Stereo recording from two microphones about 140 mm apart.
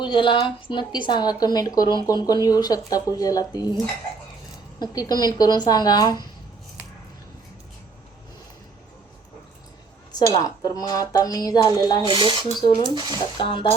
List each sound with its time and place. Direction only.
0.0 s speech: 35° left (ahead or behind)
4.8 s speech: 30° left (ahead or behind)
10.1 s speech: 30° left (ahead or behind)
12.0 s speech: 35° right (ahead or behind)
12.6 s speech: 30° left (ahead or behind)
12.9 s speech: 35° right (ahead or behind)
13.4 s speech: 35° left (ahead or behind)